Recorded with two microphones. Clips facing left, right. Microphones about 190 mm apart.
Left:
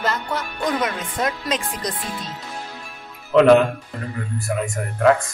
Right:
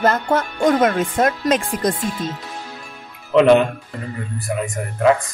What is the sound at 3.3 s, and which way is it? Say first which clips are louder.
Speech: even; centre (ahead or behind).